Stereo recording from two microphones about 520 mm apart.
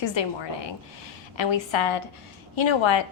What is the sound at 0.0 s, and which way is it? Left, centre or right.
A woman's voice, left.